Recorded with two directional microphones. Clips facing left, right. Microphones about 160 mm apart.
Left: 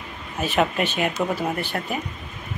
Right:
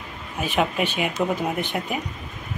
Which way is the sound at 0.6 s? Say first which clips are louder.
Left 1 dB; 5° right (ahead or behind).